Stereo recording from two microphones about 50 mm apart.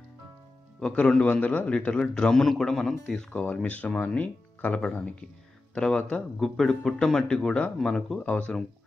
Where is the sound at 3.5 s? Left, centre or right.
Left.